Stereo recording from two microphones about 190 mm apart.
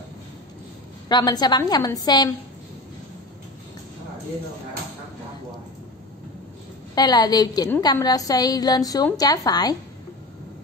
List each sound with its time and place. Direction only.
1.0 s a woman's voice: 20° left (ahead or behind)
7.0 s a woman's voice: 20° left (ahead or behind)